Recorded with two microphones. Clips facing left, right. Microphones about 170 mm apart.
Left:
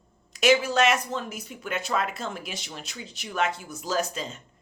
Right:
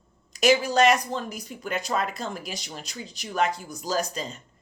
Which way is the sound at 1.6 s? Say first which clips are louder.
Right 1 dB; 40° right (ahead or behind).